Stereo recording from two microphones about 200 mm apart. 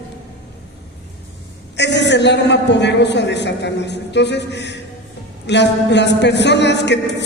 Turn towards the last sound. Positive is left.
turn(degrees=60)  # may be behind; listen again after turning